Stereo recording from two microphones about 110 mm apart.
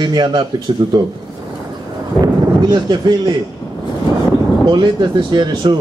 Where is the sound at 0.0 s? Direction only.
45° right (ahead or behind).